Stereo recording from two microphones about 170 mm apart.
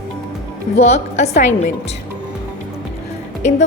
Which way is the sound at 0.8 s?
40° left (ahead or behind).